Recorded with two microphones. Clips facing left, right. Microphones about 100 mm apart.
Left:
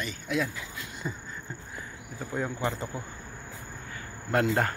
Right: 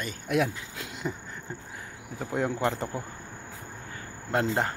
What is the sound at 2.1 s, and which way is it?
Speech, 75° right (ahead or behind).